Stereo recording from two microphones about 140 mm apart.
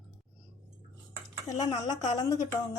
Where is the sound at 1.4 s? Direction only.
25° left (ahead or behind).